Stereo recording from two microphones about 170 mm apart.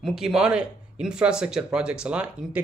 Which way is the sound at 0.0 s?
5° right (ahead or behind).